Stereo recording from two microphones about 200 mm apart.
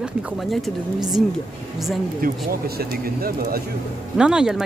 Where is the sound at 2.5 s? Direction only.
50° right (ahead or behind).